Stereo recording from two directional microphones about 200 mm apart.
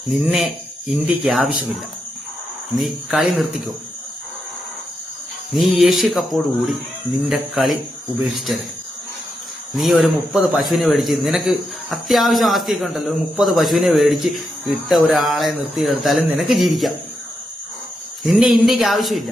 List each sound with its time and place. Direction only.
0.1 s a man's voice: centre (ahead or behind)
2.7 s a man's voice: centre (ahead or behind)
5.5 s a man's voice: centre (ahead or behind)
9.7 s a man's voice: centre (ahead or behind)
18.2 s a man's voice: centre (ahead or behind)